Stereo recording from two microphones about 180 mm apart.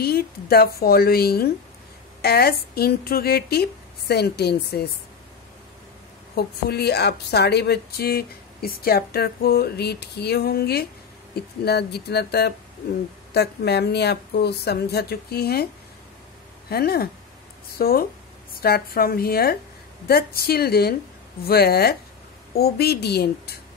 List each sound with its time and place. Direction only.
0.0 s a woman's voice: 60° left (ahead or behind)
6.3 s a woman's voice: 65° left (ahead or behind)